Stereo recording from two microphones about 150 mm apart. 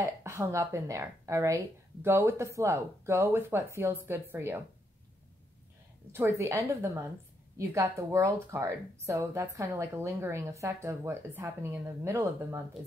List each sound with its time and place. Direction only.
0.0 s a woman's voice: 20° right (ahead or behind)
6.1 s a woman's voice: 20° right (ahead or behind)